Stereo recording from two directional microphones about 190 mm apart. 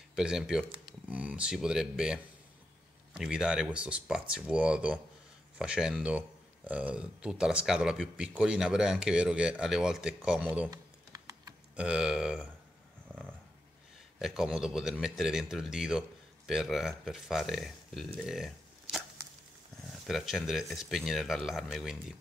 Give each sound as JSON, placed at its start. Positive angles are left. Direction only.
{"t": 0.1, "sound": "speech", "side_deg": -5}
{"t": 10.7, "sound": "typing", "side_deg": -20}
{"t": 11.7, "sound": "speech", "side_deg": -5}
{"t": 14.2, "sound": "speech", "side_deg": 0}